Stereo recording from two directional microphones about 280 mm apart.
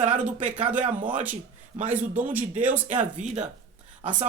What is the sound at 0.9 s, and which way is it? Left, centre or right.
Speech, right.